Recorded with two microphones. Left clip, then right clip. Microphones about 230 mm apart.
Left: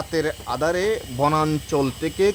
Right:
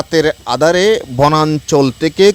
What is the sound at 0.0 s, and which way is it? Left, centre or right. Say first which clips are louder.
Speech: right 11 dB; right.